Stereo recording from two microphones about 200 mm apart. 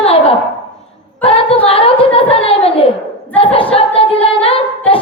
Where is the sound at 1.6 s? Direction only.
30° left (ahead or behind).